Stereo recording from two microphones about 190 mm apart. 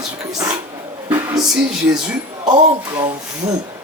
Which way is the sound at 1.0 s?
15° right (ahead or behind).